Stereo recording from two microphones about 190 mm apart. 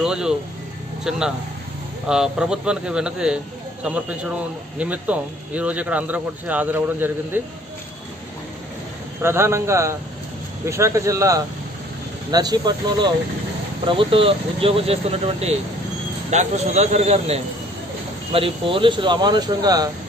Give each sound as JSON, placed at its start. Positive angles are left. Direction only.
{"t": 0.0, "sound": "speech", "side_deg": -5}
{"t": 2.0, "sound": "speech", "side_deg": -5}
{"t": 9.2, "sound": "speech", "side_deg": -15}